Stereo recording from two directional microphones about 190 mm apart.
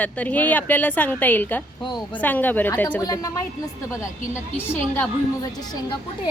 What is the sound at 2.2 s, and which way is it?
A woman's voice, 10° left (ahead or behind).